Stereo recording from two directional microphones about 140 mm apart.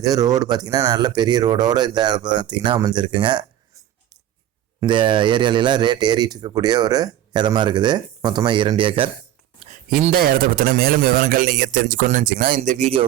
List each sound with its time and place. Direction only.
0.0 s speech: 25° right (ahead or behind)
4.9 s speech: 35° right (ahead or behind)
9.6 s a sound: 85° right
10.1 s speech: 90° right; by 13.1 s 50° right (ahead or behind)